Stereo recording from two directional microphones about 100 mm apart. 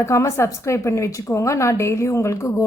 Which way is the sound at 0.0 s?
30° left (ahead or behind).